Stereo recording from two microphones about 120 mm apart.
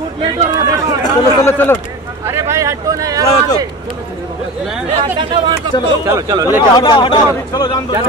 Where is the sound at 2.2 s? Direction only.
20° right (ahead or behind).